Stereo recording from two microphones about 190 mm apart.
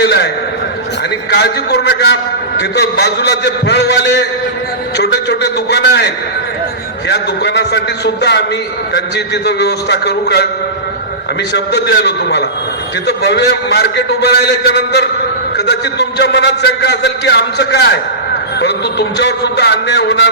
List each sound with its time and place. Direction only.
0.0 s a man's voice: 60° left (ahead or behind)
1.3 s a man's voice: 60° left (ahead or behind)
7.1 s a man's voice: 65° left (ahead or behind)
11.5 s a man's voice: 60° left (ahead or behind)